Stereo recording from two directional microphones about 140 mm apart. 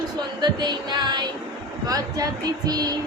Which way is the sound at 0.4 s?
30° right (ahead or behind).